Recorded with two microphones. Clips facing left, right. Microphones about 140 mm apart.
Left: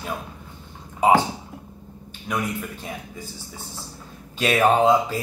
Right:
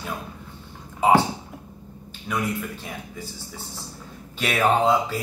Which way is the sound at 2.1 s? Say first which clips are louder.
Even; 15° left (ahead or behind).